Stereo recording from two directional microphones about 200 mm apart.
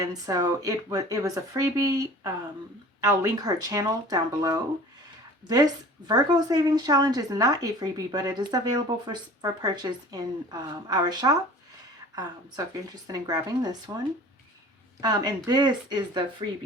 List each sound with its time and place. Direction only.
0.0 s speech: 20° right (ahead or behind)
6.1 s speech: 20° right (ahead or behind)
15.0 s speech: 20° right (ahead or behind)